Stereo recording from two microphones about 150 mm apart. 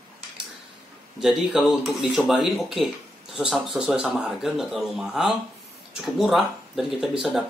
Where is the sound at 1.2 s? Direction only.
Centre (ahead or behind).